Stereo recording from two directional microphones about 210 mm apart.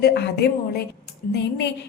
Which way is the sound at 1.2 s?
40° left (ahead or behind).